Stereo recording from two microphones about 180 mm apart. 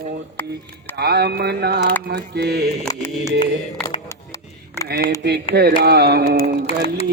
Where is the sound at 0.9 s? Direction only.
65° right (ahead or behind).